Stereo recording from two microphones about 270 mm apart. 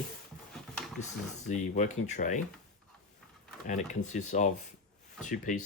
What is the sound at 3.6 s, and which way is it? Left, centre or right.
Speech, left.